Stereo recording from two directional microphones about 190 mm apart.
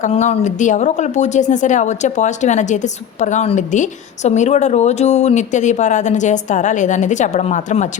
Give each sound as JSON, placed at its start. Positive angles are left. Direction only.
{"t": 0.0, "sound": "a woman's voice", "side_deg": 35}